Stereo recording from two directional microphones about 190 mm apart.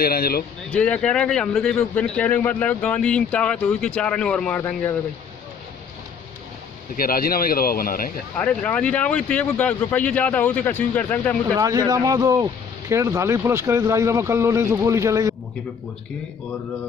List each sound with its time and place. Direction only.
0.0 s speech: 50° left (ahead or behind)
0.7 s a man's voice: 5° left (ahead or behind)
7.0 s speech: 50° left (ahead or behind)
8.4 s speech: 5° left (ahead or behind)
11.5 s speech: 15° right (ahead or behind)